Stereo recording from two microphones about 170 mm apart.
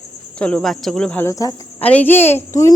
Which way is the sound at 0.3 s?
5° left (ahead or behind).